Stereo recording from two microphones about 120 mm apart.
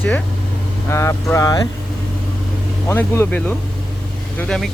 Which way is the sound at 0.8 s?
25° left (ahead or behind).